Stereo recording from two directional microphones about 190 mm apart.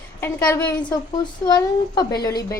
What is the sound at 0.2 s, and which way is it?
A woman's voice, 15° left (ahead or behind).